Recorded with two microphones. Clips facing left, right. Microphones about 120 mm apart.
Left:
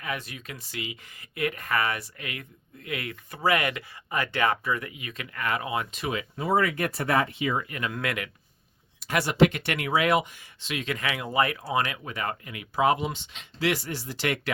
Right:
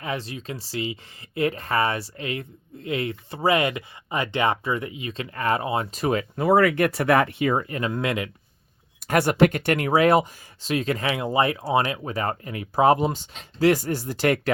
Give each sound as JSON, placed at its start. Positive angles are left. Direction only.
{"t": 0.0, "sound": "speech", "side_deg": -30}
{"t": 6.4, "sound": "speech", "side_deg": -65}
{"t": 9.0, "sound": "speech", "side_deg": -50}